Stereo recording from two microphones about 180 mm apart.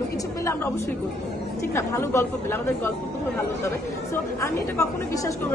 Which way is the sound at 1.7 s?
15° left (ahead or behind).